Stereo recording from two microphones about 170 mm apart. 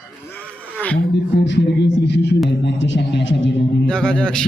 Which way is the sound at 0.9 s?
90° left.